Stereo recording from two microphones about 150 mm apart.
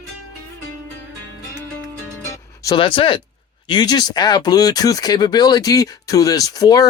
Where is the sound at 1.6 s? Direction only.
15° left (ahead or behind).